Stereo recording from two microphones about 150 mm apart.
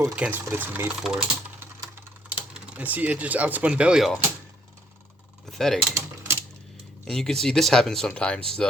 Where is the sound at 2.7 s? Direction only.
10° right (ahead or behind).